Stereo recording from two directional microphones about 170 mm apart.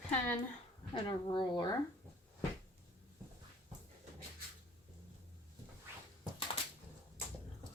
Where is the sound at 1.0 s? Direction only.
30° left (ahead or behind).